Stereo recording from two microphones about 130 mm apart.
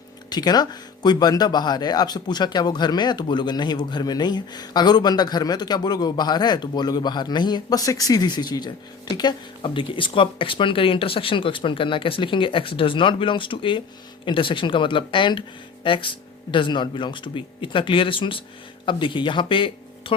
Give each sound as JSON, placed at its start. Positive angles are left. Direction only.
{"t": 0.3, "sound": "speech", "side_deg": 30}